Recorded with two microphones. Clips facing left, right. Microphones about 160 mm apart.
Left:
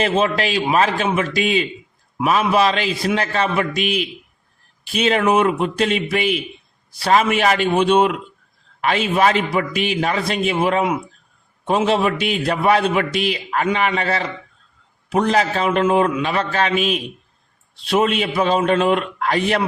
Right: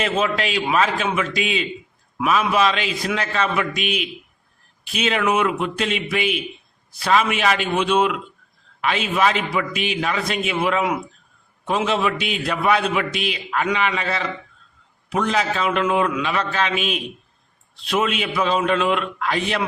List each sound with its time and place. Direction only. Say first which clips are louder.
0.0 s a man's voice: left 3 dB; 35° left (ahead or behind)
17.8 s a man's voice: left 4 dB; 40° left (ahead or behind)